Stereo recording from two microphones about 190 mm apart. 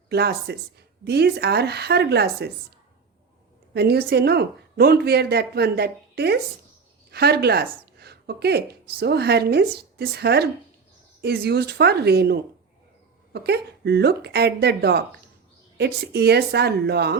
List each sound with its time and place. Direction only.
0.1 s a woman's voice: 60° right (ahead or behind)
3.8 s a woman's voice: 60° right (ahead or behind)